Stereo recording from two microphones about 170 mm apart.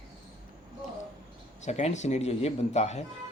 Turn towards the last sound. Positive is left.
turn(degrees=40)  # may be behind; listen again after turning